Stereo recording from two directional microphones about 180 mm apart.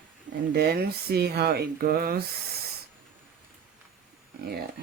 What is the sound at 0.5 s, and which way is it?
Speech, 60° right (ahead or behind).